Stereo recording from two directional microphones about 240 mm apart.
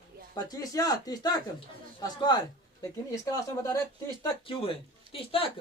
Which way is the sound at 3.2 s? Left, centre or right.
Centre.